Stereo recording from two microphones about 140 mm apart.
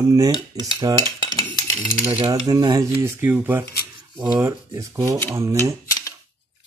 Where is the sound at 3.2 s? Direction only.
15° right (ahead or behind).